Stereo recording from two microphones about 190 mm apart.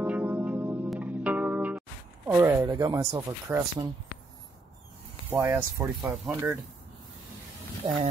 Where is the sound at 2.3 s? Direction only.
10° right (ahead or behind).